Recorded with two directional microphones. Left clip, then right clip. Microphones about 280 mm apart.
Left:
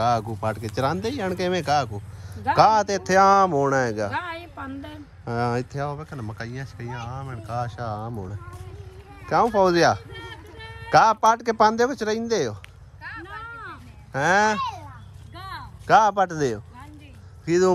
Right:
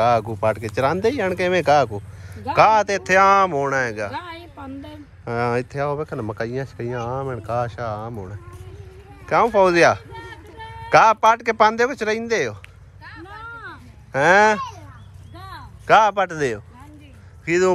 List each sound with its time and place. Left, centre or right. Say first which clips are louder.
0.0 s speech: right 5 dB; centre
4.1 s a woman's voice: left 2 dB; centre
5.2 s speech: right 4 dB; centre
13.0 s a sound: left 2 dB; centre
14.1 s speech: right 5 dB; centre
15.3 s a sound: left 2 dB; centre
15.9 s a man's voice: right 2 dB; centre